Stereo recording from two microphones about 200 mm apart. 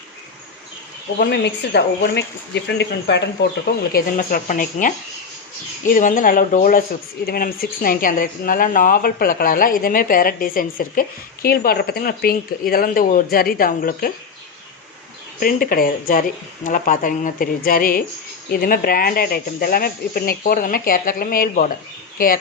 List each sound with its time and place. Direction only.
1.2 s a woman's voice: 55° left (ahead or behind)
15.4 s speech: 45° left (ahead or behind)